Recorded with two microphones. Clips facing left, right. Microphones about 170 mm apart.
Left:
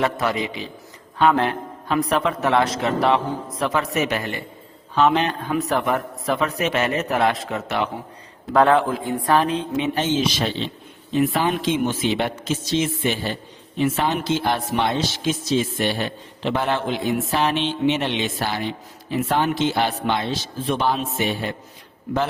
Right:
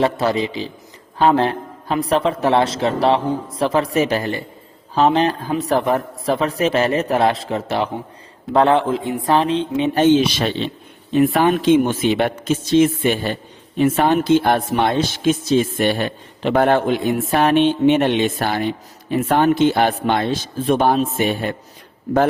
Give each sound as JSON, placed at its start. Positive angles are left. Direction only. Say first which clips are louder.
{"t": 0.0, "sound": "a man's voice", "louder": "right 4 dB", "side_deg": -30}
{"t": 9.9, "sound": "a man's voice", "louder": "right 11 dB", "side_deg": -60}